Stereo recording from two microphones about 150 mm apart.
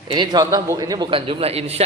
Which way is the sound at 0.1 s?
30° right (ahead or behind).